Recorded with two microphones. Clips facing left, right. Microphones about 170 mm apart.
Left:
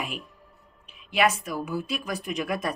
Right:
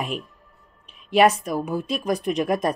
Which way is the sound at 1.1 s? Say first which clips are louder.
Right 7 dB; 40° right (ahead or behind).